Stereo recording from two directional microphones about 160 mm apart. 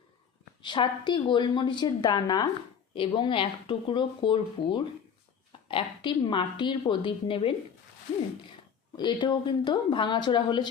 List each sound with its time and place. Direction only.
0.6 s a woman's voice: 30° left (ahead or behind)
9.0 s a woman's voice: 30° left (ahead or behind)